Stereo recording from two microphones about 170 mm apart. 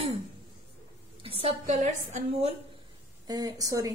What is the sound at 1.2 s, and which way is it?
Speech, 35° right (ahead or behind).